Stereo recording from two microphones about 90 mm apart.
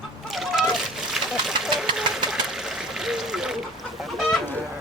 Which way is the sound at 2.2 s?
5° right (ahead or behind).